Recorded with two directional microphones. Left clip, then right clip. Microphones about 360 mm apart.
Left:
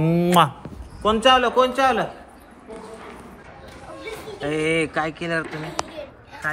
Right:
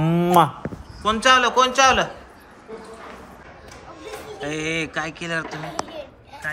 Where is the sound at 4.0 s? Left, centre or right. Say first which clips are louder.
Left 1 dB; centre.